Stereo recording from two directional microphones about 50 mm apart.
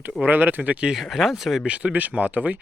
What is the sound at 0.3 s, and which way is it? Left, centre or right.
Speech, right.